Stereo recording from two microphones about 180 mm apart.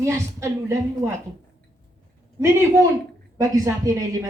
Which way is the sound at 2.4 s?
15° right (ahead or behind).